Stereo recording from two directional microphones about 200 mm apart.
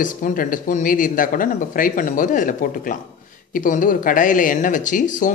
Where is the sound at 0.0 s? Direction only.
40° left (ahead or behind).